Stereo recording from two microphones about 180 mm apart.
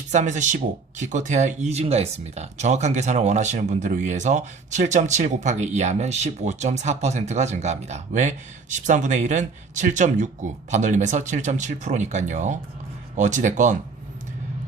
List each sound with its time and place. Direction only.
0.1 s speech: 40° right (ahead or behind)